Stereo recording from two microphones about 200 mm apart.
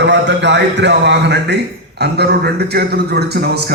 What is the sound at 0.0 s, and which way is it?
Speech, 60° right (ahead or behind).